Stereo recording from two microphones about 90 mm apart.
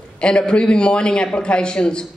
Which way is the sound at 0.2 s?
10° left (ahead or behind).